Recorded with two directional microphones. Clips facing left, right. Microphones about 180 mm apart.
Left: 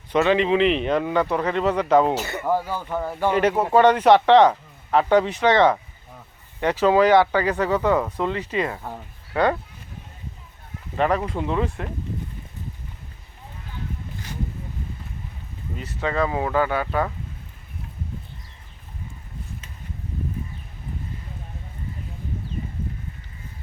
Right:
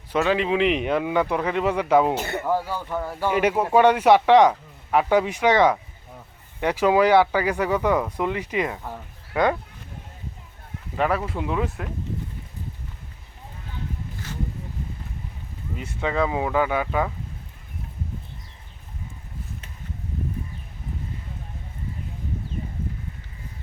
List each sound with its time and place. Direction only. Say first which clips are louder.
0.1 s speech: left 3 dB; 5° right (ahead or behind)
2.1 s speech: right 1 dB; 55° right (ahead or behind)
2.5 s speech: left 2 dB; 15° left (ahead or behind)
3.3 s speech: even; 10° right (ahead or behind)
10.9 s speech: left 2 dB; 5° right (ahead or behind)
15.8 s speech: even; 10° right (ahead or behind)